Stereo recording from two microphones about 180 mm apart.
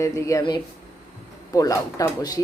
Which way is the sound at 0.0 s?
15° left (ahead or behind).